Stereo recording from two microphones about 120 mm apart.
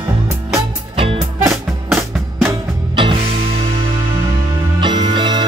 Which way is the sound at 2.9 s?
45° right (ahead or behind).